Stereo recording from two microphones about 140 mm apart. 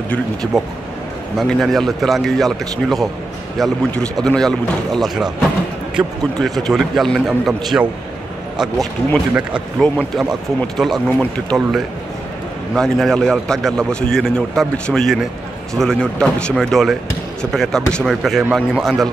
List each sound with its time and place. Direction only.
1.4 s a man's voice: centre (ahead or behind)
9.8 s a man's voice: 5° left (ahead or behind)